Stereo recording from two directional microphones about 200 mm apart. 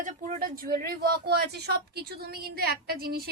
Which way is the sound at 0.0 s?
45° right (ahead or behind).